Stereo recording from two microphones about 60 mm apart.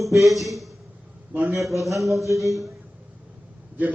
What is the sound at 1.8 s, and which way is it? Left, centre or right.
Speech, centre.